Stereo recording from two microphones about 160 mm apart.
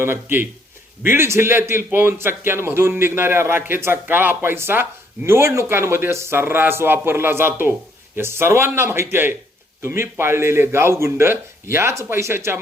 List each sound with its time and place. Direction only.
0.0 s a man's voice: 15° right (ahead or behind)